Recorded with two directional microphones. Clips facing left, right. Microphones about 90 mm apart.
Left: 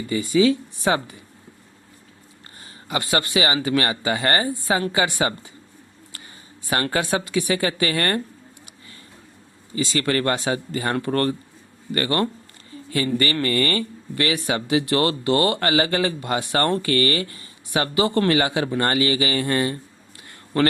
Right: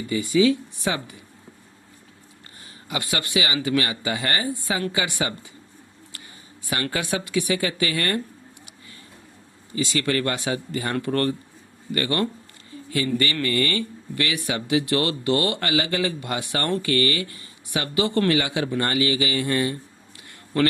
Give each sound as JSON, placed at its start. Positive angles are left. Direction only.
{"t": 0.1, "sound": "speech", "side_deg": 35}
{"t": 2.8, "sound": "speech", "side_deg": 35}
{"t": 6.7, "sound": "speech", "side_deg": 40}
{"t": 9.7, "sound": "speech", "side_deg": 35}